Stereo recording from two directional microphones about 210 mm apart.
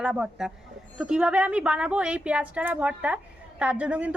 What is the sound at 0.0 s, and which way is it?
A woman's voice, 5° right (ahead or behind).